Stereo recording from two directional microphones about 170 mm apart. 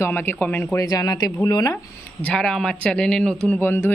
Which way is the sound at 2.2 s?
5° left (ahead or behind).